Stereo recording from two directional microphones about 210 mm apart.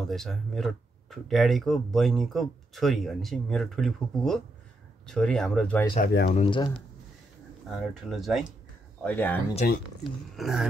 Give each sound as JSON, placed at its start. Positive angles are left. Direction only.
{"t": 0.1, "sound": "speech", "side_deg": 0}
{"t": 5.9, "sound": "speech", "side_deg": 45}
{"t": 6.3, "sound": "speech", "side_deg": 25}
{"t": 8.1, "sound": "speech", "side_deg": 0}
{"t": 9.6, "sound": "speech", "side_deg": 45}
{"t": 10.0, "sound": "speech", "side_deg": 0}